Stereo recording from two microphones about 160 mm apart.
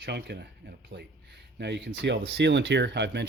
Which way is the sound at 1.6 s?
90° right.